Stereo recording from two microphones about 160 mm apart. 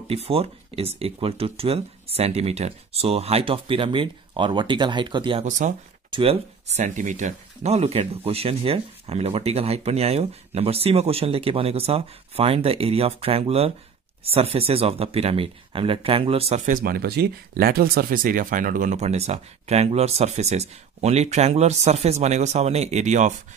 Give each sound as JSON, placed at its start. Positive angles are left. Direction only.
{"t": 0.1, "sound": "speech", "side_deg": -40}
{"t": 5.4, "sound": "speech", "side_deg": -50}
{"t": 6.0, "sound": "speech", "side_deg": -35}
{"t": 6.8, "sound": "speech", "side_deg": -50}
{"t": 16.6, "sound": "speech", "side_deg": -65}